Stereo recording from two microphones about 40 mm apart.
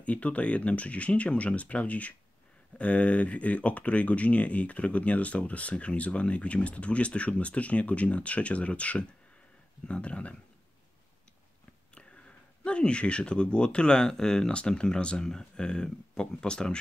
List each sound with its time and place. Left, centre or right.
0.0 s speech: left
11.9 s speech: left